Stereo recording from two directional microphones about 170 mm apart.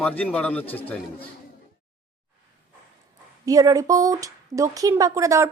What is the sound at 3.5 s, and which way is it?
Speech, 20° right (ahead or behind).